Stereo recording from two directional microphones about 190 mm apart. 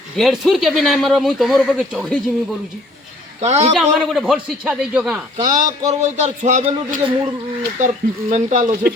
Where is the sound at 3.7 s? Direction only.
Centre (ahead or behind).